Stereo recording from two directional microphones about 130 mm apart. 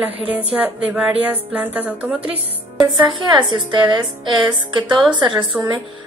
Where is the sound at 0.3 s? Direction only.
10° right (ahead or behind).